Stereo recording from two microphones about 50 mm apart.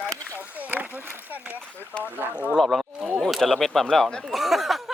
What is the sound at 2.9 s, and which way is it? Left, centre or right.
Speech, right.